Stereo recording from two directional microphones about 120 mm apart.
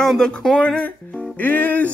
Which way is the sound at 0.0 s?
5° left (ahead or behind).